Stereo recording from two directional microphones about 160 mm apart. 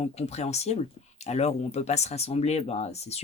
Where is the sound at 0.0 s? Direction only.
40° left (ahead or behind).